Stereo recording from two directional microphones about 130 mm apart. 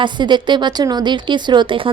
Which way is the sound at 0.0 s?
35° right (ahead or behind).